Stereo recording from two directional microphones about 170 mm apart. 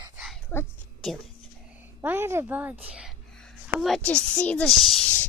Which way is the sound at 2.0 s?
15° right (ahead or behind).